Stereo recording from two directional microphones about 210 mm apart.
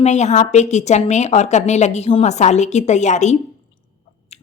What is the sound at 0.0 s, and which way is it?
A woman's voice, 30° left (ahead or behind).